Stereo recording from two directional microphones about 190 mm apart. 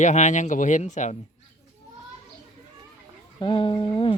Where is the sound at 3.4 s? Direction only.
25° left (ahead or behind).